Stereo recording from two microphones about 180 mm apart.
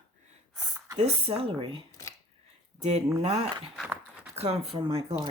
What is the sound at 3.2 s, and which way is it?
Speech, 35° right (ahead or behind).